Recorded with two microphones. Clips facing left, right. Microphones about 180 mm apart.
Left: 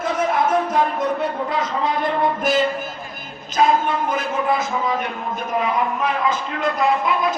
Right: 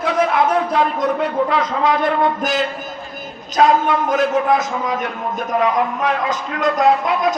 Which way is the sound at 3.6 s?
75° right (ahead or behind).